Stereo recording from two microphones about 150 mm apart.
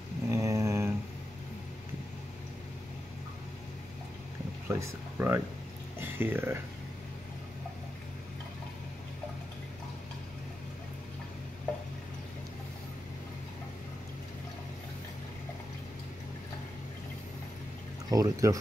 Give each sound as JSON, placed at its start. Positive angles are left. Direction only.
{"t": 0.3, "sound": "mantra", "side_deg": -20}
{"t": 4.6, "sound": "speech", "side_deg": -15}
{"t": 18.1, "sound": "speech", "side_deg": -25}